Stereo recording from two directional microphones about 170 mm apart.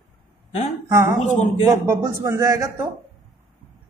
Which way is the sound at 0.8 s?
20° right (ahead or behind).